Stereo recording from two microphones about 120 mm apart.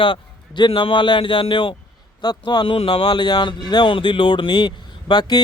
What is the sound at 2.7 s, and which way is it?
Speech, 50° left (ahead or behind).